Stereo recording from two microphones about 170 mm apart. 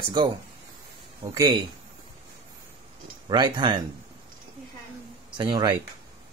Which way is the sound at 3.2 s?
25° right (ahead or behind).